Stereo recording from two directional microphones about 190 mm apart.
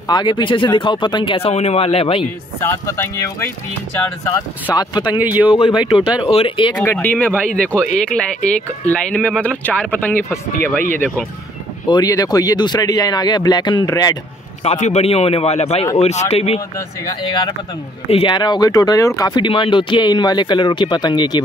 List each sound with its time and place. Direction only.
0.1 s speech: 25° left (ahead or behind)
2.6 s speech: 15° left (ahead or behind)
5.1 s speech: 10° right (ahead or behind)
6.3 s speech: 25° left (ahead or behind)
6.8 s speech: 10° left (ahead or behind)
14.6 s a man's voice: 35° left (ahead or behind)